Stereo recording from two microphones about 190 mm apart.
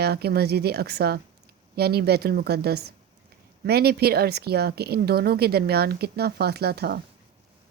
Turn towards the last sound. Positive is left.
turn(degrees=-55)  # may be behind; listen again after turning